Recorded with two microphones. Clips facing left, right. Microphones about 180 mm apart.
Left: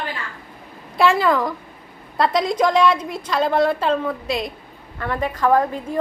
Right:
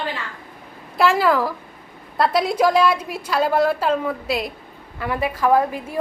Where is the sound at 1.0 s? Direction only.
5° right (ahead or behind).